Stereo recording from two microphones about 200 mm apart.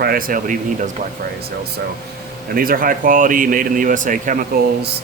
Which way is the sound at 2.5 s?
45° right (ahead or behind).